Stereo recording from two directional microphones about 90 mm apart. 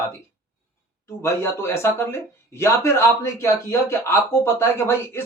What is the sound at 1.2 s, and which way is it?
A man's voice, 30° left (ahead or behind).